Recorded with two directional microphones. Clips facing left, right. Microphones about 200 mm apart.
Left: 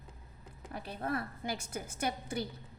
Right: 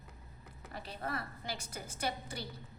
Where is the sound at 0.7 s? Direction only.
55° left (ahead or behind).